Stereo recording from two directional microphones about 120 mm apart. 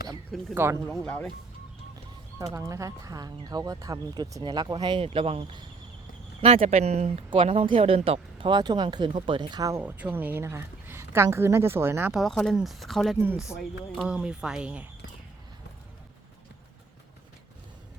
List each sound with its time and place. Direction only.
0.5 s a woman's voice: 20° right (ahead or behind)
0.9 s speech: 5° left (ahead or behind)
2.4 s speech: 30° right (ahead or behind)
5.0 s speech: 55° right (ahead or behind)
6.7 s speech: 65° right (ahead or behind)
7.3 s speech: 50° right (ahead or behind); by 9.8 s 30° right (ahead or behind)
9.8 s a woman's voice: 15° right (ahead or behind)
12.1 s speech: 5° left (ahead or behind)